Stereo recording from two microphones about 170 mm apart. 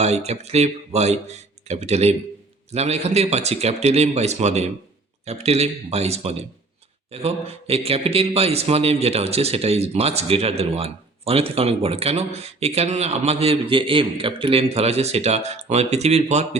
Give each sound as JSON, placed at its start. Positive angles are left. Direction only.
{"t": 0.0, "sound": "a man's voice", "side_deg": -40}